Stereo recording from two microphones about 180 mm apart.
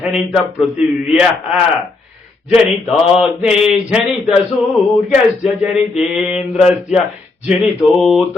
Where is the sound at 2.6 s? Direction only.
5° right (ahead or behind).